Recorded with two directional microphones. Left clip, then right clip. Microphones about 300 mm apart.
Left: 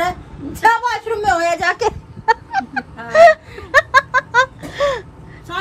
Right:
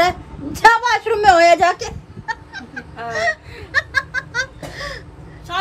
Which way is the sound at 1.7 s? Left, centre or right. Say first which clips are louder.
Left 10 dB; centre.